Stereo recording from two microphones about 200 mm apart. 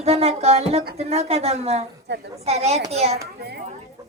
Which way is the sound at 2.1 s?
60° right (ahead or behind).